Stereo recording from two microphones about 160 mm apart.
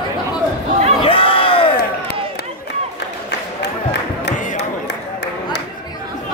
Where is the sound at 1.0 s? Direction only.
35° left (ahead or behind).